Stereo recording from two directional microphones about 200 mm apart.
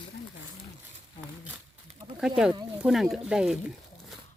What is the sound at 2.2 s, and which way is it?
Speech, 5° right (ahead or behind).